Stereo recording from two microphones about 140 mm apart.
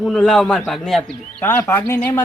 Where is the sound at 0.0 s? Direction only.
Centre (ahead or behind).